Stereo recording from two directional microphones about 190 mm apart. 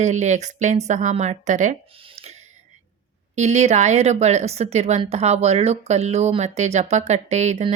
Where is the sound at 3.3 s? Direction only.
35° right (ahead or behind).